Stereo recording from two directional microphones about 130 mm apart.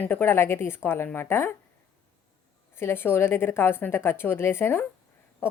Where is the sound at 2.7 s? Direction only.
20° left (ahead or behind).